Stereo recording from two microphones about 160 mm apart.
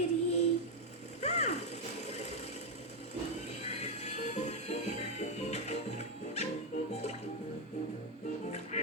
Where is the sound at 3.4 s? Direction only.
45° left (ahead or behind).